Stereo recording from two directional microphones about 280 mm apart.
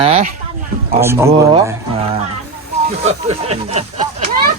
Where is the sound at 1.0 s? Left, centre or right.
Centre.